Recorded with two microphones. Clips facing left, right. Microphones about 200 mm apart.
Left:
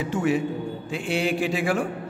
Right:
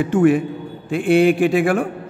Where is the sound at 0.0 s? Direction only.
55° right (ahead or behind).